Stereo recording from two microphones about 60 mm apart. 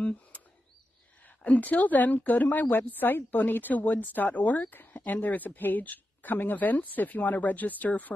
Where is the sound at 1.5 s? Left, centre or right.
Left.